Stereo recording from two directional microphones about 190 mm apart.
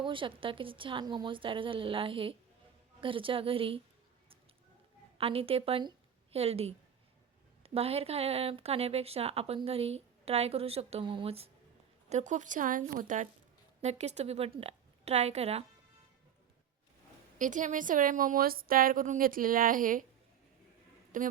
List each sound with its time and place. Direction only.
0.0 s speech: 25° right (ahead or behind)
5.1 s a woman's voice: 30° right (ahead or behind)
17.3 s a woman's voice: 40° right (ahead or behind)
21.1 s a woman's voice: 45° right (ahead or behind)